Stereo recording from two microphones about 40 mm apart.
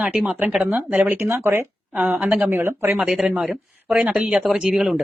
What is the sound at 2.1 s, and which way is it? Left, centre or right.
Speech, right.